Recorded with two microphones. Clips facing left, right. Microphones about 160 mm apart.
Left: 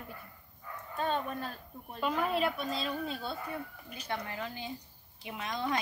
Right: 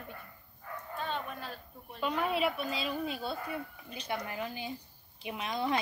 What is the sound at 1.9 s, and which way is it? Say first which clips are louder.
Speech: left 1 dB; centre (ahead or behind).